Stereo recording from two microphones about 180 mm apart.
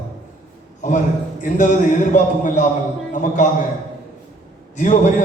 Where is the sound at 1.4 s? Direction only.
45° left (ahead or behind).